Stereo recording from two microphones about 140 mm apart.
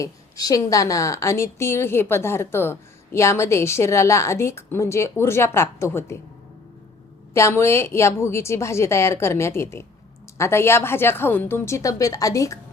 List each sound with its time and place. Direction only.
0.0 s a woman's voice: 25° left (ahead or behind)
7.3 s a woman's voice: 20° left (ahead or behind)